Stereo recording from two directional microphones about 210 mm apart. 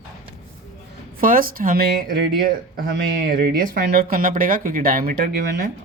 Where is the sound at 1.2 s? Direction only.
40° right (ahead or behind).